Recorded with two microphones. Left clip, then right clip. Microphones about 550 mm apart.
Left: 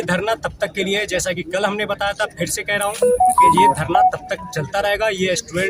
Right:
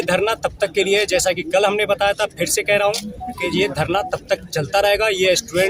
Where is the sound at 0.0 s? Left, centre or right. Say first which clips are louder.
Right 2 dB; right.